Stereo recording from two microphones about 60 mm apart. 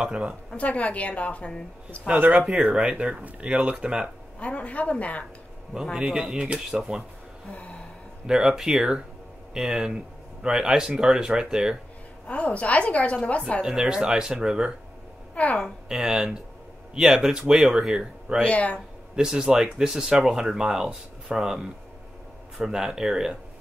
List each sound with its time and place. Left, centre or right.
0.0 s speech: centre
0.5 s speech: left
2.5 s speech: centre
4.4 s speech: left
5.9 s speech: centre
8.3 s speech: centre
12.3 s speech: left
13.6 s speech: centre
15.3 s a woman's voice: left
15.9 s speech: centre
18.4 s speech: left
19.1 s speech: centre